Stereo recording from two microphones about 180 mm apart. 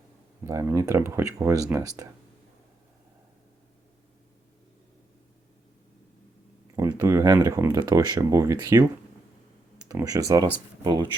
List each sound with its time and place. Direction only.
0.4 s speech: 15° right (ahead or behind)
6.7 s speech: 15° right (ahead or behind)
9.9 s speech: 20° right (ahead or behind)